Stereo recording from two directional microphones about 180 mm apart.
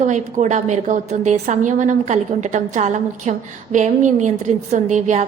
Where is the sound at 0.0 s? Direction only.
45° right (ahead or behind).